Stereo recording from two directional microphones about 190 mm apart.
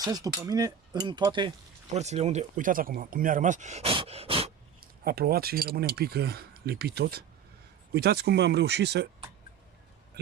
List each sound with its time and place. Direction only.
0.0 s speech: 20° right (ahead or behind)
1.9 s speech: 35° right (ahead or behind)
4.8 s speech: 55° right (ahead or behind)